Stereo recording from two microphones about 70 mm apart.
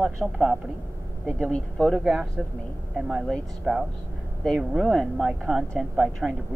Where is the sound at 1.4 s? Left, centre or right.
Centre.